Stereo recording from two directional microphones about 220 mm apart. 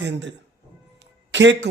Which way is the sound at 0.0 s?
55° right (ahead or behind).